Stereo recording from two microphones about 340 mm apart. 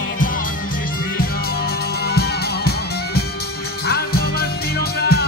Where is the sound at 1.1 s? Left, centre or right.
Left.